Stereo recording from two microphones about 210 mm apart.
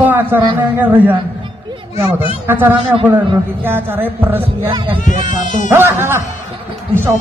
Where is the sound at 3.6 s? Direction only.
10° right (ahead or behind).